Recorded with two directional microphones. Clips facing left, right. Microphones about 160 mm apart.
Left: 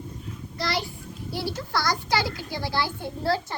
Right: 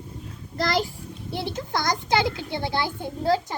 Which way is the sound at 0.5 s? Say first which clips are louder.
Right 4 dB; 45° right (ahead or behind).